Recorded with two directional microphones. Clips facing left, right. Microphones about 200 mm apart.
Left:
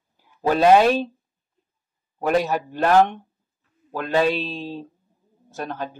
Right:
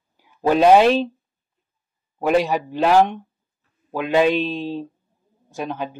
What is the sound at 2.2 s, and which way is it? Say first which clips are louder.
Speech: right 2 dB; 10° right (ahead or behind).